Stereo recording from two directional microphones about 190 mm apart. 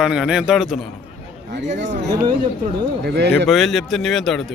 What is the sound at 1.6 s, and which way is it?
Speech, 40° right (ahead or behind).